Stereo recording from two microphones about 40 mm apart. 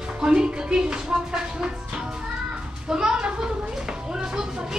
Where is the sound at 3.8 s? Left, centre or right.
Centre.